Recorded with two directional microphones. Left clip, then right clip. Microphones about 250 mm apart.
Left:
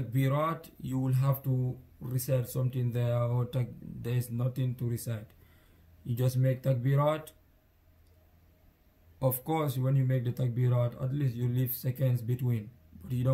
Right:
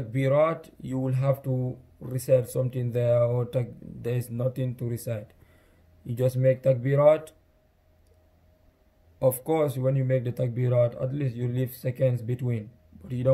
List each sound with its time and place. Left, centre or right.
0.1 s speech: centre
9.2 s speech: centre